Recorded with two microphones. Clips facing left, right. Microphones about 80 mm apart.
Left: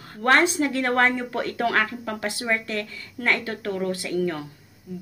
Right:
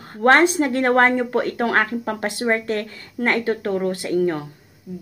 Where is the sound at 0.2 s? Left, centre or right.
Right.